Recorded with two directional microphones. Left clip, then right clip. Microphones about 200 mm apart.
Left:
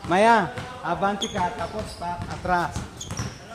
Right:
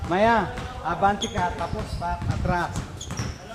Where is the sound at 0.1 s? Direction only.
60° left (ahead or behind).